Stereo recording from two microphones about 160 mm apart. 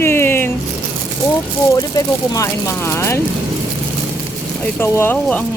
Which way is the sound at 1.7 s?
20° left (ahead or behind).